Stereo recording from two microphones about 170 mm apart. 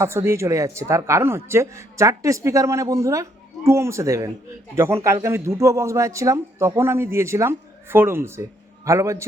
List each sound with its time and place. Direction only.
0.0 s speech: 15° right (ahead or behind)